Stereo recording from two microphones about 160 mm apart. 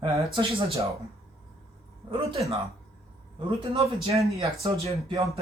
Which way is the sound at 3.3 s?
30° right (ahead or behind).